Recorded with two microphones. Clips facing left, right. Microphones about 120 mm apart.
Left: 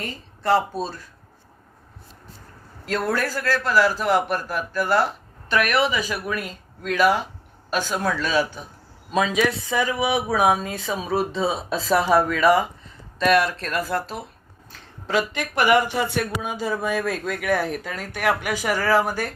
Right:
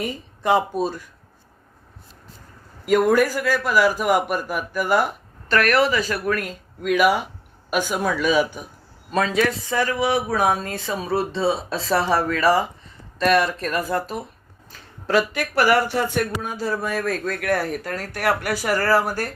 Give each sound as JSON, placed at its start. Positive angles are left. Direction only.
{"t": 0.0, "sound": "a man's voice", "side_deg": -15}
{"t": 2.8, "sound": "a man's voice", "side_deg": -10}
{"t": 5.5, "sound": "speech", "side_deg": 10}
{"t": 6.4, "sound": "a man's voice", "side_deg": -10}
{"t": 9.1, "sound": "speech", "side_deg": 10}
{"t": 11.3, "sound": "speech", "side_deg": 0}
{"t": 13.6, "sound": "a man's voice", "side_deg": -10}
{"t": 15.5, "sound": "speech", "side_deg": 15}
{"t": 16.1, "sound": "speech", "side_deg": 5}